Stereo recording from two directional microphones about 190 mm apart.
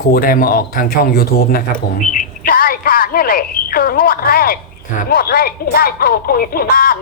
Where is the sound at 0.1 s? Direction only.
50° left (ahead or behind).